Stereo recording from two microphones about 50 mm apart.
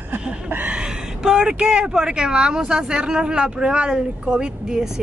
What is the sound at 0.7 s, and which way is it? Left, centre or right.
Speech, centre.